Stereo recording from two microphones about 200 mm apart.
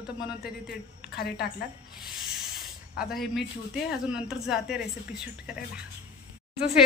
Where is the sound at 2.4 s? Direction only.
Centre (ahead or behind).